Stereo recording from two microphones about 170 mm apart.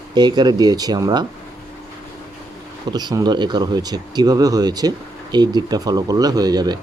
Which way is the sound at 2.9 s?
25° right (ahead or behind).